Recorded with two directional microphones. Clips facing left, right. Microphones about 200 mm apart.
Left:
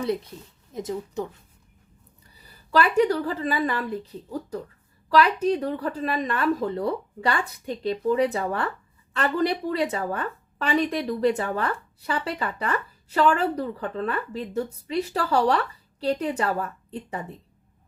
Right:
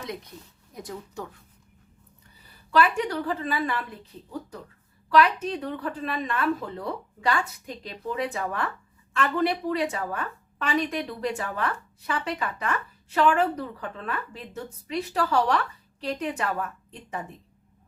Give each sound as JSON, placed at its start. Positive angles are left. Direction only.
{"t": 0.7, "sound": "speech", "side_deg": 20}
{"t": 2.6, "sound": "a woman's voice", "side_deg": 40}